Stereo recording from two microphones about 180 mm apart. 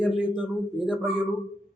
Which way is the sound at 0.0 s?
5° right (ahead or behind).